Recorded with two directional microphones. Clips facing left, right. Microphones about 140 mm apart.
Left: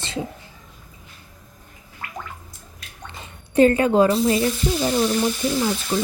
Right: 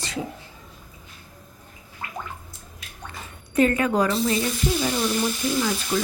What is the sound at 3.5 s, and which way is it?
Speech, 30° left (ahead or behind).